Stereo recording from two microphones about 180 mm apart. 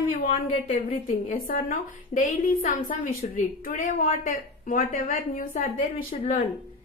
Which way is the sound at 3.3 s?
50° left (ahead or behind).